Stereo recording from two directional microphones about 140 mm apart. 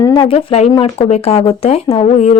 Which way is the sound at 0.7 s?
30° left (ahead or behind).